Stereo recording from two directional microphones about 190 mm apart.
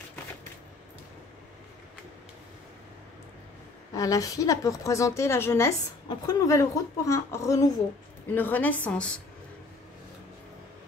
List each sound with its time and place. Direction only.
3.9 s a woman's voice: 20° left (ahead or behind)